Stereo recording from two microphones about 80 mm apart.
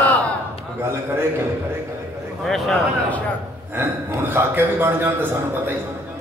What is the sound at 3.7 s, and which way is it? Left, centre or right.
A man's voice, right.